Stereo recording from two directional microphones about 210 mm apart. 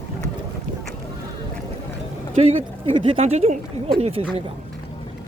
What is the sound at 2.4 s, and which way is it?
Speech, 30° right (ahead or behind).